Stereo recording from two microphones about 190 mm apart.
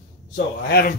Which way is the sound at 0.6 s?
55° left (ahead or behind).